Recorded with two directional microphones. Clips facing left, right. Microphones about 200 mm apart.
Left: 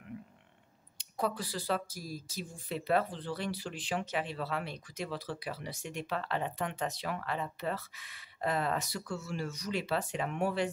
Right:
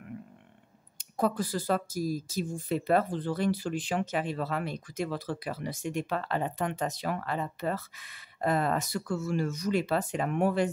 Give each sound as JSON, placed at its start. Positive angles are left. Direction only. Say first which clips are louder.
{"t": 0.9, "sound": "speech", "louder": "right 6 dB", "side_deg": -50}